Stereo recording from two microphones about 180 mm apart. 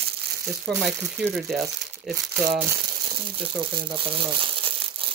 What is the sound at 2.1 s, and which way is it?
Speech, centre (ahead or behind).